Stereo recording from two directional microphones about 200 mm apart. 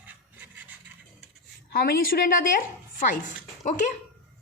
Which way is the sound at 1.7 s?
50° left (ahead or behind).